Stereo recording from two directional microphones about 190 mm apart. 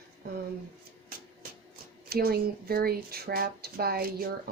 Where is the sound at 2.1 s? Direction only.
55° right (ahead or behind).